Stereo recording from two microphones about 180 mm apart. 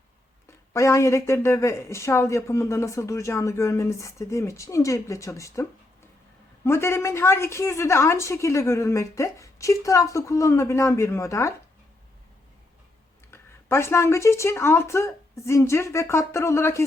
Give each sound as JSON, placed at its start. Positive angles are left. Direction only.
{"t": 0.7, "sound": "speech", "side_deg": 15}
{"t": 6.7, "sound": "speech", "side_deg": 15}
{"t": 13.3, "sound": "speech", "side_deg": 15}